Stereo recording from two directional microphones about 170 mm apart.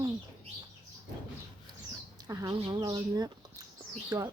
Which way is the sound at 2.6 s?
25° right (ahead or behind).